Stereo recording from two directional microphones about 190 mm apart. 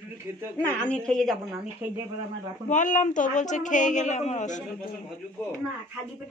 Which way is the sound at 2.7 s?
40° left (ahead or behind).